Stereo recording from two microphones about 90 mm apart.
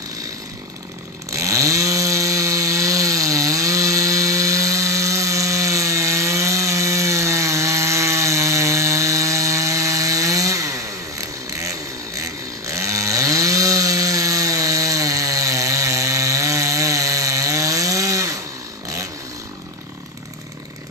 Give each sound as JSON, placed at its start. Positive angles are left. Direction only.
{"t": 1.3, "sound": "chainsaw", "side_deg": -35}